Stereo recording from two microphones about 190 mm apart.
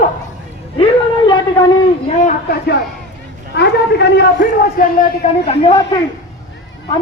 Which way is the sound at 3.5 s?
60° left (ahead or behind).